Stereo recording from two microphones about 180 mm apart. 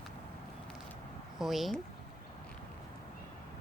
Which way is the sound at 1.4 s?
Centre (ahead or behind).